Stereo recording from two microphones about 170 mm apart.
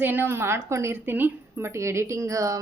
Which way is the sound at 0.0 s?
10° right (ahead or behind).